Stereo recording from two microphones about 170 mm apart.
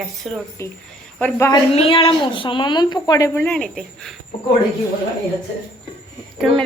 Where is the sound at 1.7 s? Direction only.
35° left (ahead or behind); by 4.1 s 5° left (ahead or behind).